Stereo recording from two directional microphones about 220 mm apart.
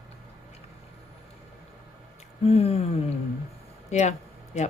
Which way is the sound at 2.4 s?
25° left (ahead or behind).